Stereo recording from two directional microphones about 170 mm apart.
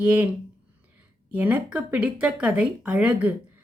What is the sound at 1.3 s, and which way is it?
A woman's voice, 10° right (ahead or behind).